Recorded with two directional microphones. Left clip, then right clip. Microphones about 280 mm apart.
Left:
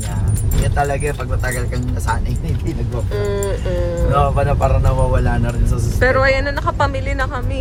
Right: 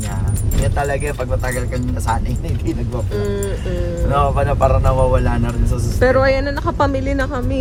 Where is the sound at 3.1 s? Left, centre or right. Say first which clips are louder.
Left 2 dB; centre.